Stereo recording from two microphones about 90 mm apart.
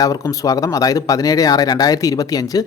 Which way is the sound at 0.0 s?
40° left (ahead or behind).